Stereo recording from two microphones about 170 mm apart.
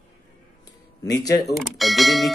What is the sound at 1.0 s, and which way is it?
Speech, 20° left (ahead or behind).